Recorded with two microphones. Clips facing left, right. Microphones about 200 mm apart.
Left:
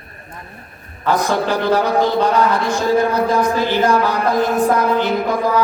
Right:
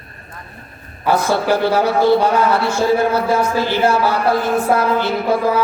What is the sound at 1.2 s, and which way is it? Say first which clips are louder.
Speech: right 3 dB; 15° left (ahead or behind).